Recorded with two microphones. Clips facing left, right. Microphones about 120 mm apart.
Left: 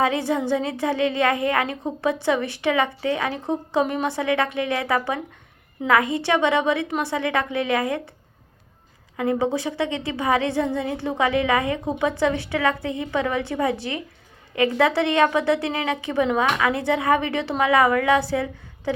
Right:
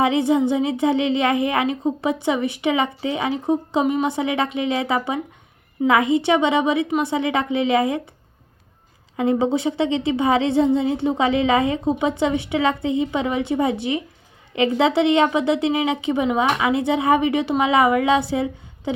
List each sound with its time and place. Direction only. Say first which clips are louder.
0.0 s a woman's voice: right 4 dB; 20° right (ahead or behind)
9.1 s a woman's voice: right 3 dB; 25° right (ahead or behind)